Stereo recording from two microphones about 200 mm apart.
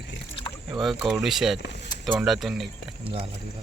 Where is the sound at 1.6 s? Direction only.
60° left (ahead or behind).